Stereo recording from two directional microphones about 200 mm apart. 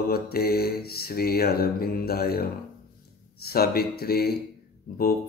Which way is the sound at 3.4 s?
50° left (ahead or behind).